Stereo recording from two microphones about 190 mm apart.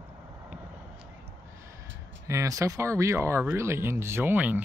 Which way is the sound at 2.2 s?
15° right (ahead or behind).